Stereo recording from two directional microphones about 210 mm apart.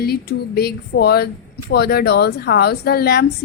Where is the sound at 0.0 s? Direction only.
50° left (ahead or behind).